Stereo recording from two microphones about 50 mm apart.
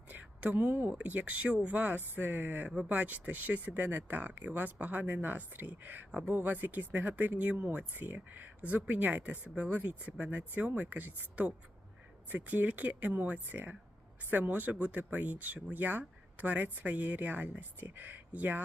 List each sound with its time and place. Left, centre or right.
0.1 s a sound: right
0.7 s speech: right
0.9 s speech: right